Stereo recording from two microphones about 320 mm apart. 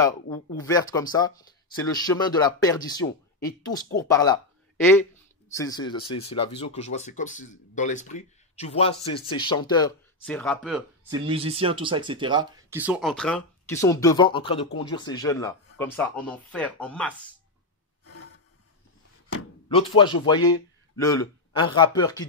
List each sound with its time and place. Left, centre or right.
0.6 s speech: centre
5.5 s speech: centre
11.1 s speech: centre
18.0 s a sound: left
19.7 s speech: centre